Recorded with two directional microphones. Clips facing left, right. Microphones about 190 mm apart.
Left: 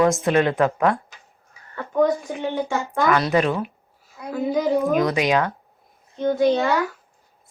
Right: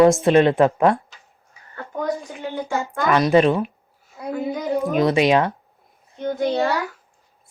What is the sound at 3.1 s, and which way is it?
A woman's voice, 20° right (ahead or behind).